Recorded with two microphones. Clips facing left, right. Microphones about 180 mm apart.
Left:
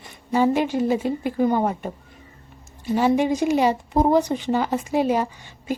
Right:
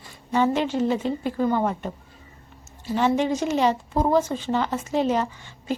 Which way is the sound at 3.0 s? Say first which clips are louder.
Left 2 dB; 10° left (ahead or behind).